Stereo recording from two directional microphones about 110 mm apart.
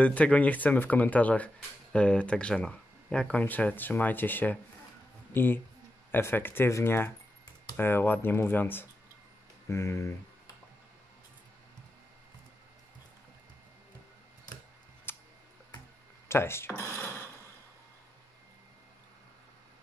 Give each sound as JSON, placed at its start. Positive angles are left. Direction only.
{"t": 0.0, "sound": "speech", "side_deg": 10}
{"t": 15.1, "sound": "tick", "side_deg": 20}
{"t": 16.3, "sound": "speech", "side_deg": 20}